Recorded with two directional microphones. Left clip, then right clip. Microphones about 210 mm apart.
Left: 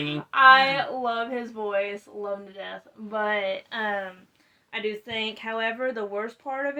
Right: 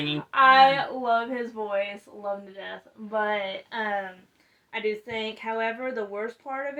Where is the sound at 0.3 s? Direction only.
30° left (ahead or behind).